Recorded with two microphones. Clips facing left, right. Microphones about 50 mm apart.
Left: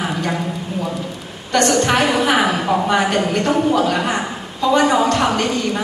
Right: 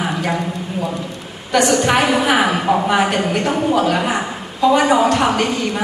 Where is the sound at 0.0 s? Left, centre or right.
Centre.